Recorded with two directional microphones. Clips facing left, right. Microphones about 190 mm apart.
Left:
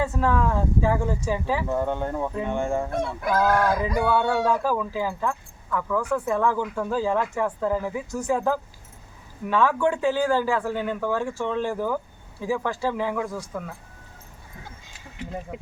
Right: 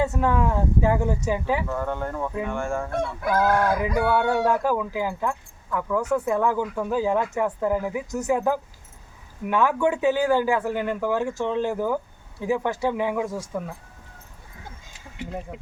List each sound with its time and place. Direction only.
0.0 s speech: 15° right (ahead or behind)
1.6 s speech: 20° left (ahead or behind)
3.3 s speech: 15° right (ahead or behind)
3.7 s speech: 5° right (ahead or behind); by 13.7 s 20° right (ahead or behind)
15.5 s speech: 5° left (ahead or behind)